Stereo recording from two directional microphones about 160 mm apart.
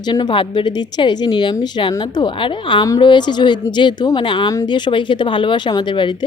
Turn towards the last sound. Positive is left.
turn(degrees=30)  # may be behind; listen again after turning